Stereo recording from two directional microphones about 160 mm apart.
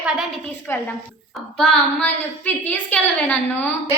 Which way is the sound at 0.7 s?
15° left (ahead or behind).